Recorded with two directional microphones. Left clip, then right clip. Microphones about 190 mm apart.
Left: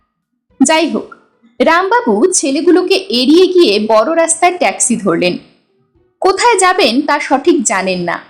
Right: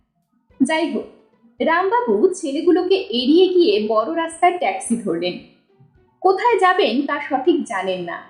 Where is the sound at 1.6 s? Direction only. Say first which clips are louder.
Left 7 dB; 40° left (ahead or behind).